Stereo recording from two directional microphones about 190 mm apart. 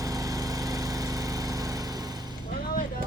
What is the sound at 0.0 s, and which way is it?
Lawn mower, 20° right (ahead or behind).